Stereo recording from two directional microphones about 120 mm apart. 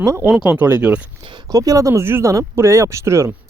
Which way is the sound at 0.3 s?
10° right (ahead or behind).